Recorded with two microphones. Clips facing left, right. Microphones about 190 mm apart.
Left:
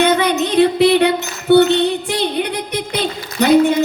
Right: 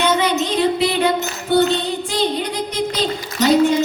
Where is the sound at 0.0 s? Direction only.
60° left (ahead or behind).